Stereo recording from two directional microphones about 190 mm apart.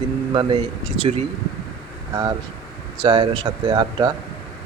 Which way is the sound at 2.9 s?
25° right (ahead or behind).